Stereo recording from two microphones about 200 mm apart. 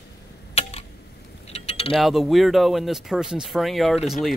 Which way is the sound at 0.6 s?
30° left (ahead or behind).